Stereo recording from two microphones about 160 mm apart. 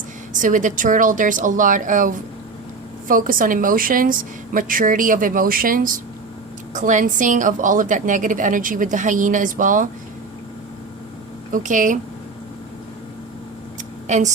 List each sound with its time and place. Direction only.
0.3 s a woman's voice: 55° right (ahead or behind)
11.5 s a woman's voice: 55° right (ahead or behind)
14.1 s a woman's voice: 50° right (ahead or behind)